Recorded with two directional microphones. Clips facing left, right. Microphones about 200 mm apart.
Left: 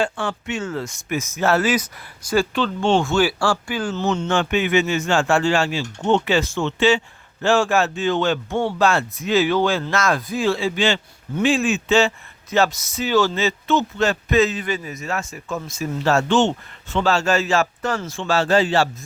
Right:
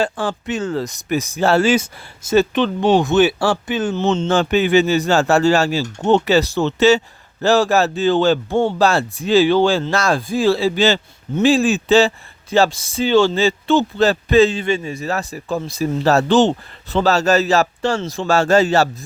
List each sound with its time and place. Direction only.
0.0 s a man's voice: 35° right (ahead or behind)